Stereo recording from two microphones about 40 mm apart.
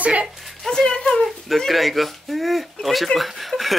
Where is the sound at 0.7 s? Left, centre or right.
Centre.